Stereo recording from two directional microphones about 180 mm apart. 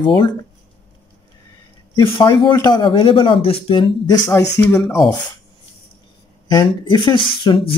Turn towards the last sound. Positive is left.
turn(degrees=30)  # may be behind; listen again after turning